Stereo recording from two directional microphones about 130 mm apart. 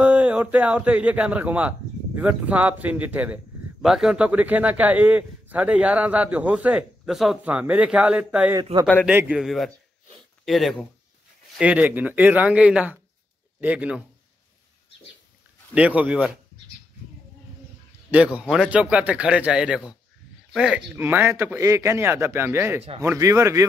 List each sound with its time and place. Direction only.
0.0 s a man's voice: 10° right (ahead or behind)
11.5 s a man's voice: 10° right (ahead or behind)
15.7 s a man's voice: 10° right (ahead or behind)
18.1 s a man's voice: 10° right (ahead or behind)
20.9 s a man's voice: 15° right (ahead or behind)